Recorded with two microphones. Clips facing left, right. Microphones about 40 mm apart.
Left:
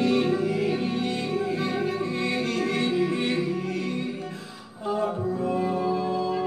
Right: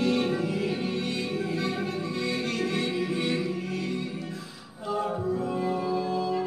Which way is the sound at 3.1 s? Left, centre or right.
Left.